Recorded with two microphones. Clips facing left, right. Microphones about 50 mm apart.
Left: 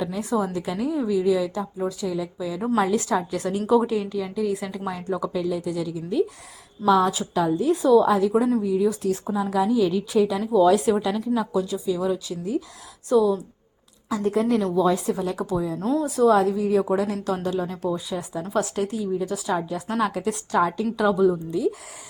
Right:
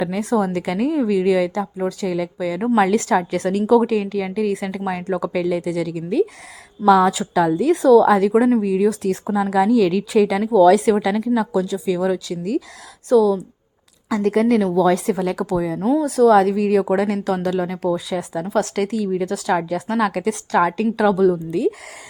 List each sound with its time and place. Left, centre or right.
0.0 s a woman's voice: right
2.7 s a woman's voice: right
13.1 s a woman's voice: right
14.1 s a woman's voice: right
15.8 s speech: right
16.0 s a woman's voice: right
18.5 s a woman's voice: right